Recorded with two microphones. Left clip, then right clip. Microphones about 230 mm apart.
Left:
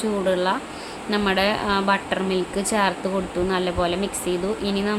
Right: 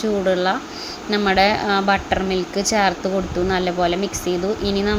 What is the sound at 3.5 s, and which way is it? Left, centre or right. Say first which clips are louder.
A woman's voice: right 4 dB; centre.